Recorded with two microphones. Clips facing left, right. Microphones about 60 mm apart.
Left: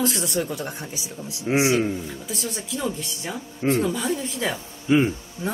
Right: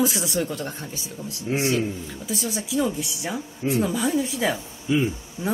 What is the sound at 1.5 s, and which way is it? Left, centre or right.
Music, left.